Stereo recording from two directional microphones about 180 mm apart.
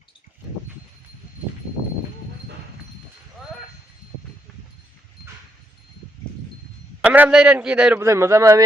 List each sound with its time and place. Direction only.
7.0 s a man's voice: 10° right (ahead or behind)